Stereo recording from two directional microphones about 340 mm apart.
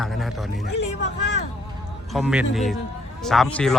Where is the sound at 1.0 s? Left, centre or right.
Left.